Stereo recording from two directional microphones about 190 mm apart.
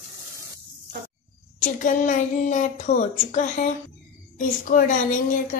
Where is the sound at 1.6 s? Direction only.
45° left (ahead or behind).